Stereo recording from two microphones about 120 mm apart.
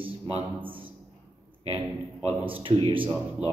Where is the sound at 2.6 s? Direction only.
50° right (ahead or behind).